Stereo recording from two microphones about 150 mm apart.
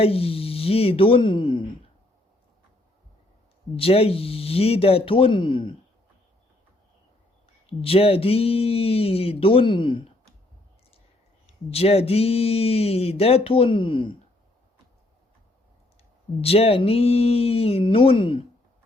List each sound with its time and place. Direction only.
0.0 s speech: 40° left (ahead or behind)
3.8 s speech: 40° left (ahead or behind)
7.7 s speech: 40° left (ahead or behind)
11.7 s speech: 40° left (ahead or behind)
16.4 s speech: 40° left (ahead or behind)